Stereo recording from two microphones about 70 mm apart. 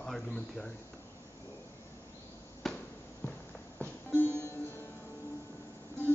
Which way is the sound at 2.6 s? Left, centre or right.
Centre.